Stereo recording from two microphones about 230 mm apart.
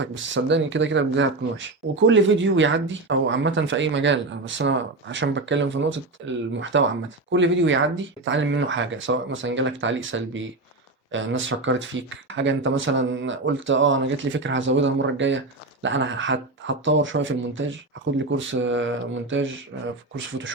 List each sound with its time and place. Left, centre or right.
0.0 s speech: right